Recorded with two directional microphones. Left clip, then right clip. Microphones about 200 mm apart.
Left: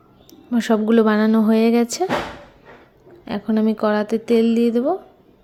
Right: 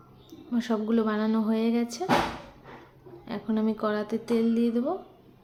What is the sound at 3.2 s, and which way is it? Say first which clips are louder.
Speech: left 9 dB; 35° left (ahead or behind).